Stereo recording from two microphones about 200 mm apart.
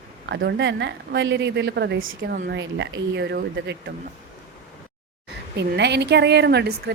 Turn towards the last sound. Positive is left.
turn(degrees=-55)  # may be behind; listen again after turning